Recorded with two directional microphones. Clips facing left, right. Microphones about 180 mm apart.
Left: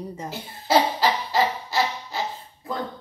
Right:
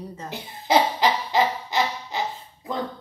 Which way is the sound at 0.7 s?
15° right (ahead or behind).